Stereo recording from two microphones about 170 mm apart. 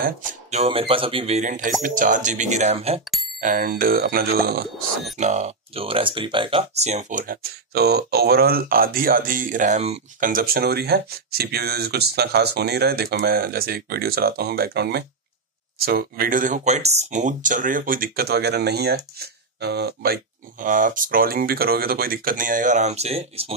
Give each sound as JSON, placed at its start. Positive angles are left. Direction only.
{"t": 0.0, "sound": "speech", "side_deg": -45}
{"t": 3.3, "sound": "speech", "side_deg": -55}
{"t": 5.2, "sound": "speech", "side_deg": -40}
{"t": 6.8, "sound": "speech", "side_deg": -40}
{"t": 7.7, "sound": "speech", "side_deg": -75}
{"t": 10.3, "sound": "speech", "side_deg": -60}
{"t": 20.6, "sound": "speech", "side_deg": -50}